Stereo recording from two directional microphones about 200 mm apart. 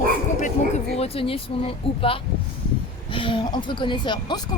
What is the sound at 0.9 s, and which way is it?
Speech, 30° left (ahead or behind).